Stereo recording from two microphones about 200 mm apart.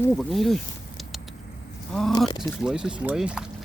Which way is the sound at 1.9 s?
Centre (ahead or behind).